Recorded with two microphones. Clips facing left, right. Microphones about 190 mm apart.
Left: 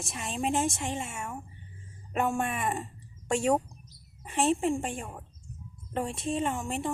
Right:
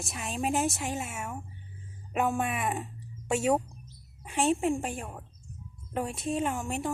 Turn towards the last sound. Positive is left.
turn(degrees=0)  # may be behind; listen again after turning